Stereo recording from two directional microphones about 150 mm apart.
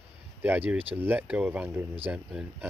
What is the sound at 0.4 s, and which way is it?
Speech, 15° right (ahead or behind).